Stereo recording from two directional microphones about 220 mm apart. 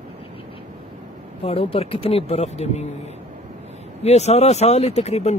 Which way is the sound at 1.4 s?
25° left (ahead or behind).